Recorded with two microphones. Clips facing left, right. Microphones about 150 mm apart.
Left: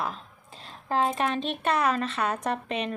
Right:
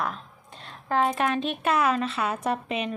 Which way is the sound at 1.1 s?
Centre (ahead or behind).